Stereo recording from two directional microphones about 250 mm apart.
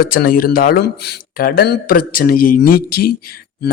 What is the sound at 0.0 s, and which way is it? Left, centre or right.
Speech, left.